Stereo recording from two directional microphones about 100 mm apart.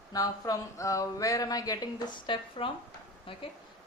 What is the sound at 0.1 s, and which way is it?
Speech, 35° left (ahead or behind).